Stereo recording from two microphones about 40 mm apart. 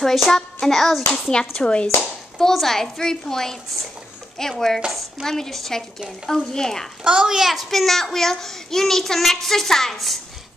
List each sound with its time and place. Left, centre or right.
0.0 s a child's voice: centre
1.3 s speech: left
2.3 s a child's voice: centre
7.1 s a child's voice: centre
7.5 s a child's voice: centre